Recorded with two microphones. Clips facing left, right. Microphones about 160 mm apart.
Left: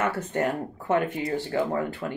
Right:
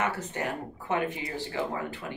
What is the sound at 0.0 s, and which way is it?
Speech, 50° left (ahead or behind).